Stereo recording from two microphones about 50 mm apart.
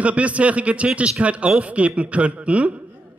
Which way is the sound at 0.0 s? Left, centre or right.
Right.